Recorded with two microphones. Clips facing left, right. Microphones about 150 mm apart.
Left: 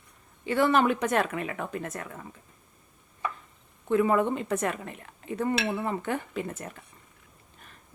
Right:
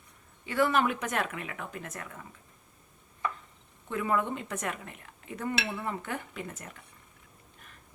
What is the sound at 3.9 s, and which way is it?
Speech, 35° left (ahead or behind).